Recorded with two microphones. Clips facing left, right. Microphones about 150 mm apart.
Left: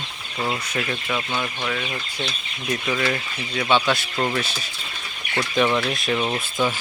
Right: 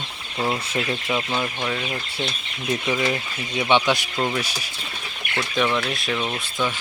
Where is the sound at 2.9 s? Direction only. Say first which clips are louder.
Even; 15° right (ahead or behind).